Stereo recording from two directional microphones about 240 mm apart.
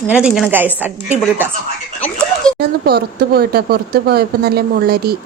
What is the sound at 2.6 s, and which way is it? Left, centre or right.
Speech, right.